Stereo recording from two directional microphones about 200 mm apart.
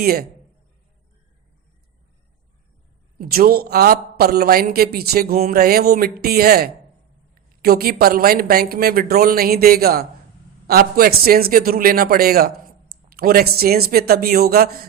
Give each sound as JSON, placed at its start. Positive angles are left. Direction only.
{"t": 0.0, "sound": "a man's voice", "side_deg": -50}
{"t": 3.2, "sound": "a man's voice", "side_deg": -50}